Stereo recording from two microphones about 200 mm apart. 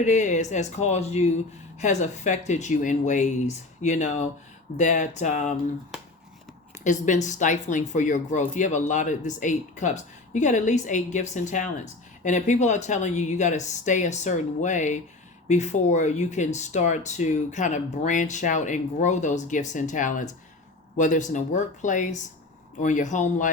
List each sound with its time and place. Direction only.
0.0 s speech: 35° left (ahead or behind)
6.8 s speech: 40° left (ahead or behind)